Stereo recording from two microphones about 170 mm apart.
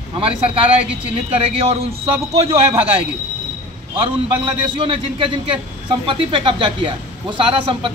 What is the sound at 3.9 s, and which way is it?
A man's voice, 30° right (ahead or behind).